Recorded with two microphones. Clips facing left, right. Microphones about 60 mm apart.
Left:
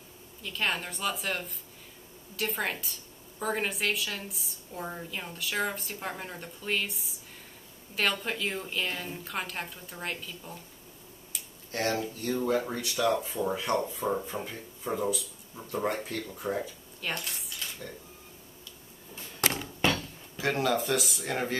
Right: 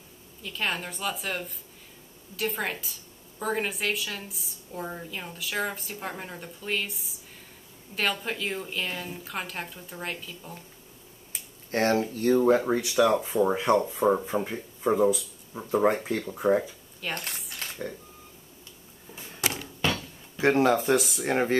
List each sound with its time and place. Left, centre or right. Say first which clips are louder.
0.4 s a woman's voice: right 1 dB; centre
11.3 s speech: right 6 dB; right
12.5 s speech: right 7 dB; right
17.0 s a woman's voice: right 1 dB; centre
17.5 s a sound: right 2 dB; right
20.3 s speech: right 6 dB; right